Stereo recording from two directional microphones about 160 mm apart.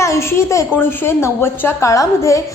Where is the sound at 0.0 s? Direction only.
15° left (ahead or behind).